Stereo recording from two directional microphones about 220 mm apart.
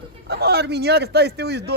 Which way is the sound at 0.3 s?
45° right (ahead or behind).